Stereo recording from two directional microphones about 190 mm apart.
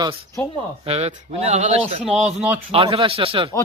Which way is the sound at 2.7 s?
30° right (ahead or behind).